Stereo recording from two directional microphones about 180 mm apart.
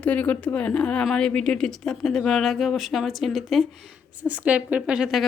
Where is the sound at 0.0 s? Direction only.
10° left (ahead or behind).